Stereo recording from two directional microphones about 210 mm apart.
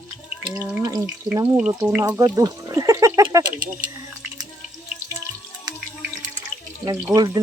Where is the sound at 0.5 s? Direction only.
10° right (ahead or behind).